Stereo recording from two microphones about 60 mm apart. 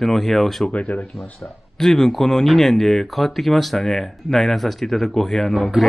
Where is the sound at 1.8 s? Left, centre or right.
Centre.